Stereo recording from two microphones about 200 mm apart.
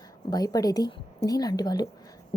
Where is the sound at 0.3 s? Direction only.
20° left (ahead or behind).